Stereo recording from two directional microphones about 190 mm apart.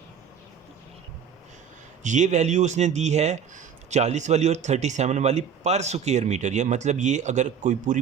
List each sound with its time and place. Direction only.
2.0 s speech: 40° right (ahead or behind)